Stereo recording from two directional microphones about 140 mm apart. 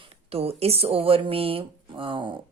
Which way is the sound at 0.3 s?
45° right (ahead or behind).